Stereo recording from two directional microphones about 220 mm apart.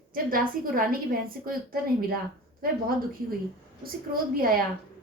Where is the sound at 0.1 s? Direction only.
40° right (ahead or behind).